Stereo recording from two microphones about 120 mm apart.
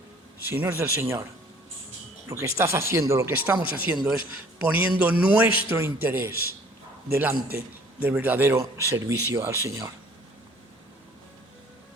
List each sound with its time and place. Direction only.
0.4 s a man's voice: 20° right (ahead or behind)